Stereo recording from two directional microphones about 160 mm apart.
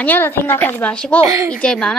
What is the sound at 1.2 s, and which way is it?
Speech, 20° right (ahead or behind).